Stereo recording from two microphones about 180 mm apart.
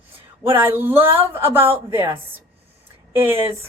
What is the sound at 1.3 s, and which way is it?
Speech, 10° right (ahead or behind).